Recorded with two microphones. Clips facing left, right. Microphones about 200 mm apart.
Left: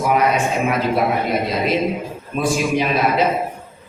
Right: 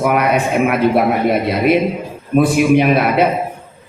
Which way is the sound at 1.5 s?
60° right (ahead or behind).